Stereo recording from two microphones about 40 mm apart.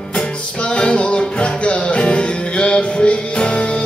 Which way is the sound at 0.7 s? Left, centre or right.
Left.